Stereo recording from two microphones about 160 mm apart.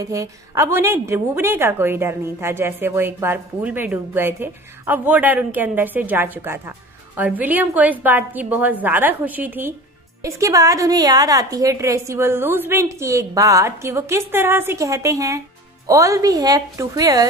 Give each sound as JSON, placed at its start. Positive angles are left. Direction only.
{"t": 0.0, "sound": "a woman's voice", "side_deg": -20}